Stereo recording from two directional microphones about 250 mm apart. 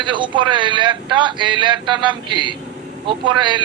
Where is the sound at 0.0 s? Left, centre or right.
Centre.